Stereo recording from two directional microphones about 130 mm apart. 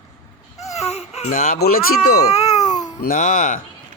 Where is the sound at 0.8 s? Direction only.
55° left (ahead or behind).